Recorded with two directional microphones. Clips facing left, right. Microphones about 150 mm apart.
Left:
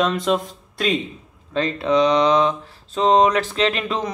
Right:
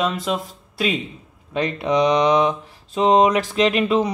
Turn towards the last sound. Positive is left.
turn(degrees=-10)  # may be behind; listen again after turning